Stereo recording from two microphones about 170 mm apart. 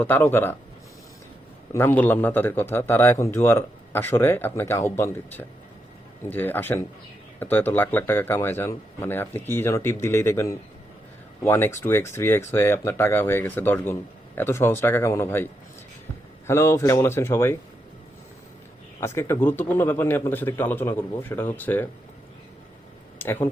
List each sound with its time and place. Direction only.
0.0 s a man's voice: 10° left (ahead or behind)
1.7 s a man's voice: 15° left (ahead or behind)
16.5 s a man's voice: 15° left (ahead or behind)
18.9 s a man's voice: 15° left (ahead or behind)
23.1 s a sound: 15° left (ahead or behind)